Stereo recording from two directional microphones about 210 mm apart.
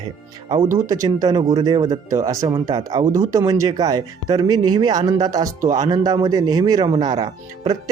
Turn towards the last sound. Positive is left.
turn(degrees=-20)  # may be behind; listen again after turning